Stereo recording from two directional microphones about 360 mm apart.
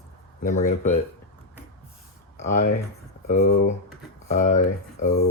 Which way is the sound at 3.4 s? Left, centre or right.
Left.